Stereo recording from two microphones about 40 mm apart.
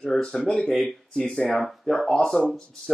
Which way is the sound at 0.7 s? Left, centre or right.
Centre.